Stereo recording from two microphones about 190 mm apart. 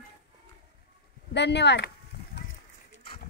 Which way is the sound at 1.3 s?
65° left (ahead or behind).